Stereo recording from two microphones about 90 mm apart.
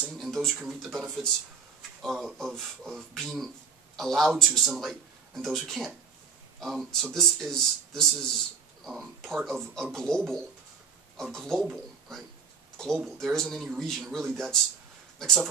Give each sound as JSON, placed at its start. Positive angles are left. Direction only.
{"t": 0.0, "sound": "a sound", "side_deg": 5}
{"t": 0.7, "sound": "a man's voice", "side_deg": 0}
{"t": 12.7, "sound": "a man's voice", "side_deg": 5}